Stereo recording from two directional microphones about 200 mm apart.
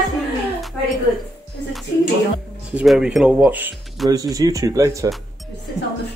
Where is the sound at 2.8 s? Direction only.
5° right (ahead or behind).